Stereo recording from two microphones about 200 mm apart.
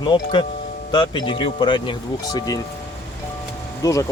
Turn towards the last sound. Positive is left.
turn(degrees=15)  # may be behind; listen again after turning